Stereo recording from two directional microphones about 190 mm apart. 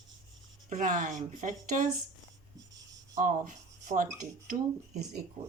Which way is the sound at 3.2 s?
45° right (ahead or behind).